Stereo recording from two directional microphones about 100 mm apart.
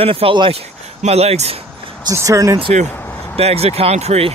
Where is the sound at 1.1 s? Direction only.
90° right.